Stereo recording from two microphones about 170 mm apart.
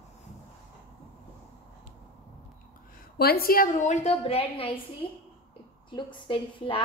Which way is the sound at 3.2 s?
65° left (ahead or behind).